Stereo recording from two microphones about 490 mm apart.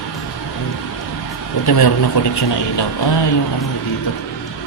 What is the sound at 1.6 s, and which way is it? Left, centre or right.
A man's voice, left.